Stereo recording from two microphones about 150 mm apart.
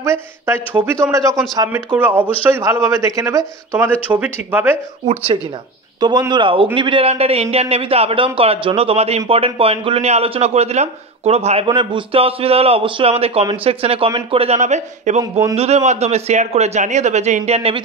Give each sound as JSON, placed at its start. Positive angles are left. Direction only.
{"t": 0.0, "sound": "speech", "side_deg": -20}
{"t": 5.0, "sound": "a man's voice", "side_deg": -40}
{"t": 5.9, "sound": "a man's voice", "side_deg": -25}
{"t": 11.6, "sound": "a man's voice", "side_deg": -30}